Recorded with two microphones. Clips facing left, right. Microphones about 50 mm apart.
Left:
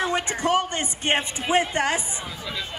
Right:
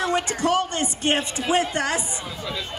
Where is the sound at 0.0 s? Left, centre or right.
Left.